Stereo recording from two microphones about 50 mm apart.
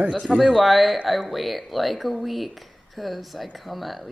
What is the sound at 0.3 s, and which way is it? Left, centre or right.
Speech, centre.